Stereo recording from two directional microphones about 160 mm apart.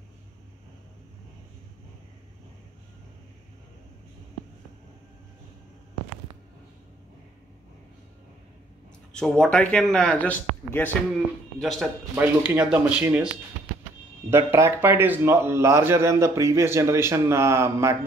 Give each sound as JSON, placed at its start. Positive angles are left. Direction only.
{"t": 9.1, "sound": "speech", "side_deg": 5}
{"t": 11.6, "sound": "a man's voice", "side_deg": 0}
{"t": 14.3, "sound": "a man's voice", "side_deg": -15}